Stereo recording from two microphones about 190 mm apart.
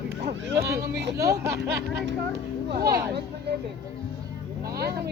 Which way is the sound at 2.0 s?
60° right (ahead or behind).